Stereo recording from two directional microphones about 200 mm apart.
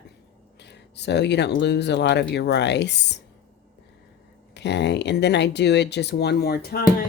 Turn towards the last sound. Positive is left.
turn(degrees=50)  # may be behind; listen again after turning